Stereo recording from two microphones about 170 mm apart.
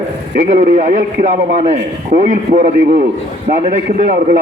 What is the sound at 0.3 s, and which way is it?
A man's voice, 50° right (ahead or behind).